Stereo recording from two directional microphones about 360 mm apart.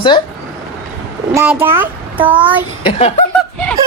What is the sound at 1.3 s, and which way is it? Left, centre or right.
Speech, centre.